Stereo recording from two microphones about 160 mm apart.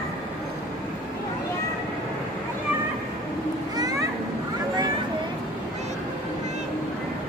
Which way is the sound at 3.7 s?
25° right (ahead or behind).